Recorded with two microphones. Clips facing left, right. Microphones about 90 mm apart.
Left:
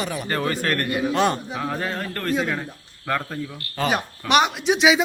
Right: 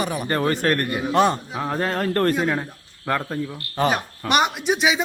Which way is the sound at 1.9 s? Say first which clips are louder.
Right 5 dB; 45° right (ahead or behind).